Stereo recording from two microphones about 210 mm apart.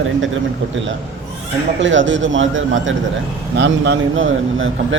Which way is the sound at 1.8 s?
65° right (ahead or behind).